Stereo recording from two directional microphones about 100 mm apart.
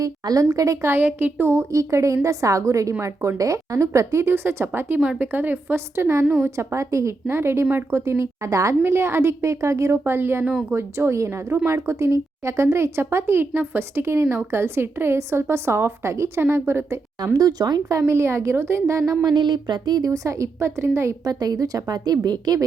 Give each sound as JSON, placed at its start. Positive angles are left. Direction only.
{"t": 0.0, "sound": "a woman's voice", "side_deg": -35}
{"t": 17.3, "sound": "a woman's voice", "side_deg": -40}
{"t": 19.2, "sound": "a woman's voice", "side_deg": -50}